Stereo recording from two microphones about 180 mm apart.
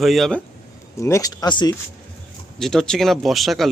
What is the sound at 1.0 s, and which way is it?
Speech, 15° left (ahead or behind).